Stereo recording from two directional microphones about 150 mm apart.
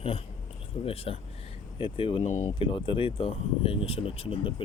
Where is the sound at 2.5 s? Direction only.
35° left (ahead or behind).